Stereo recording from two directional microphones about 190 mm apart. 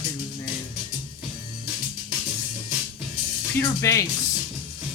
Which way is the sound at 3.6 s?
15° left (ahead or behind).